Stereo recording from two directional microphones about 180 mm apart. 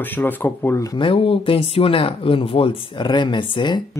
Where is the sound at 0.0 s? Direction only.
10° left (ahead or behind).